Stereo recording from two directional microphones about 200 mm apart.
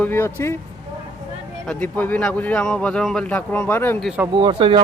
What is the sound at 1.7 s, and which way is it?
A man's voice, 5° left (ahead or behind).